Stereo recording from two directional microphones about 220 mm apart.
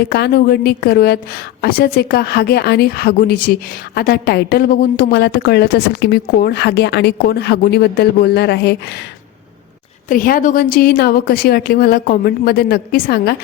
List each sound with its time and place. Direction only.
0.0 s a woman's voice: 45° left (ahead or behind)
10.1 s a woman's voice: 40° left (ahead or behind)